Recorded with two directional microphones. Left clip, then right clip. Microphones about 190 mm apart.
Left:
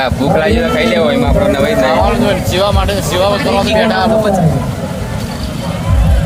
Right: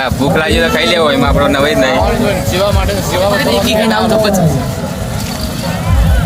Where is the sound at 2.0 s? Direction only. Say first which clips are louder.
Left 1 dB; 15° left (ahead or behind).